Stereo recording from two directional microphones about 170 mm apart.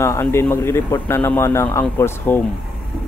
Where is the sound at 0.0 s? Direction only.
20° left (ahead or behind).